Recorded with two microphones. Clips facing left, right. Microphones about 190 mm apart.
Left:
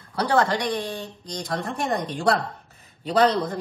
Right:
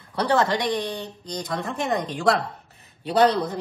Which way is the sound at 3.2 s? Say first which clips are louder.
Right 1 dB; 5° right (ahead or behind).